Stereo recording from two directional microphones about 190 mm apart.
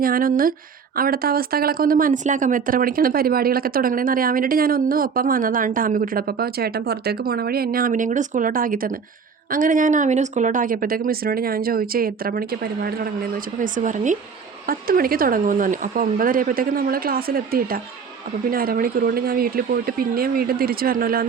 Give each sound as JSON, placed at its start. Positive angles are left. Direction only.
{"t": 0.0, "sound": "speech", "side_deg": -50}